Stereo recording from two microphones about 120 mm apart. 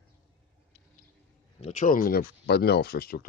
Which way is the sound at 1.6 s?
75° left (ahead or behind).